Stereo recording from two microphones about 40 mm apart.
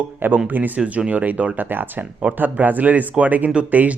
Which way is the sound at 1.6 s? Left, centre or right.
Right.